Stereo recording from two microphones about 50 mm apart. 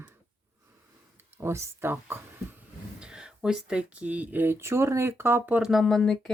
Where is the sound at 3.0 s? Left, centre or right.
Centre.